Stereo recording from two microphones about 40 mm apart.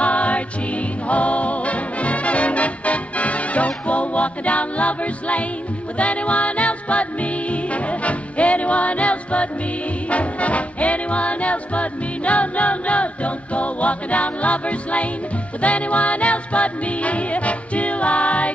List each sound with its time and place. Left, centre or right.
0.0 s music: left